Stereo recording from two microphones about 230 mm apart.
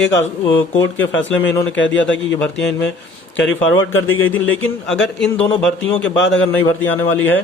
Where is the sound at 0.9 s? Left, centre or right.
Left.